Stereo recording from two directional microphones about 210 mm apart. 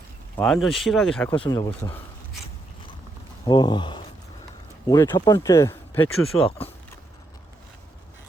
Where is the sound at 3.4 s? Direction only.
20° left (ahead or behind).